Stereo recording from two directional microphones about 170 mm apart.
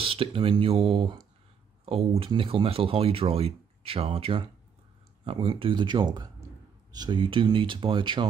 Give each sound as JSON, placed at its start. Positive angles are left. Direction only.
{"t": 0.0, "sound": "speech", "side_deg": -35}